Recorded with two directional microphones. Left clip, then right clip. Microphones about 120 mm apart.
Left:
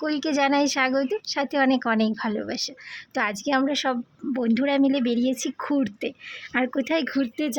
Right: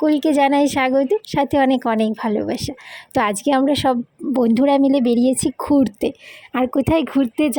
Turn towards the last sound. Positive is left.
turn(degrees=-20)  # may be behind; listen again after turning